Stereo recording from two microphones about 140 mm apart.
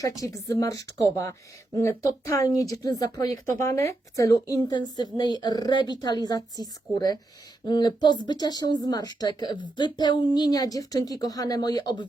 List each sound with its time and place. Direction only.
0.2 s speech: 25° left (ahead or behind)